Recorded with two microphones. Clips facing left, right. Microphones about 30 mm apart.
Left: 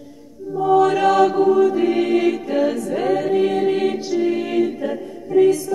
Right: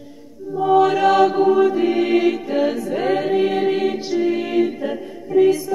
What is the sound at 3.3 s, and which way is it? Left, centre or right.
Music, centre.